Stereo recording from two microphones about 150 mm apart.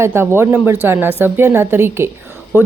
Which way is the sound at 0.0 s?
15° right (ahead or behind).